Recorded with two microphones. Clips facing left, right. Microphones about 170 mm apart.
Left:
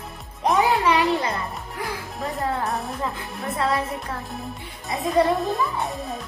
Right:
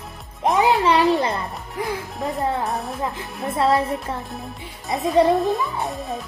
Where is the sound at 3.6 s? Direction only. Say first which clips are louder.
Right 5 dB; 30° right (ahead or behind).